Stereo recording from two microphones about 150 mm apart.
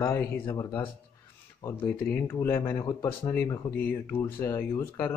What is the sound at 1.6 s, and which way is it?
Speech, 15° left (ahead or behind).